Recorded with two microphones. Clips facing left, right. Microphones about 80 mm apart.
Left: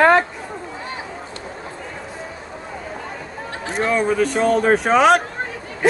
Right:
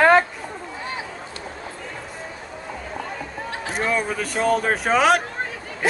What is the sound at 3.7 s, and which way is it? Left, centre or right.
Speech, centre.